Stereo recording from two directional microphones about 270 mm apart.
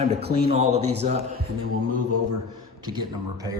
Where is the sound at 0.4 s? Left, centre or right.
Right.